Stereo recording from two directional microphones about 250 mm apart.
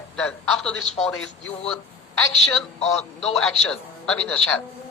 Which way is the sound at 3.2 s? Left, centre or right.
Centre.